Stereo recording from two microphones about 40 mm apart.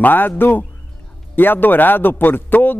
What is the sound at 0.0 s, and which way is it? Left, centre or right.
A man's voice, left.